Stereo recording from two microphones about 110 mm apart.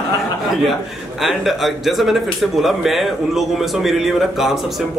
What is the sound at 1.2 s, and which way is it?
A man's voice, centre (ahead or behind).